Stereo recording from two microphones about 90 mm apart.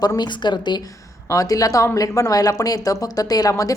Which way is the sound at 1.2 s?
40° left (ahead or behind).